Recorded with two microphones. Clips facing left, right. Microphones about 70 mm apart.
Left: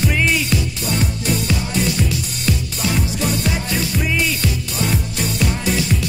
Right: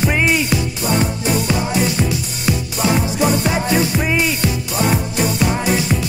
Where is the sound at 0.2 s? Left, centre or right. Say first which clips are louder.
Right 2 dB; centre.